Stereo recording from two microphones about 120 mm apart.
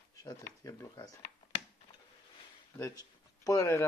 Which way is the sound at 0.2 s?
30° left (ahead or behind).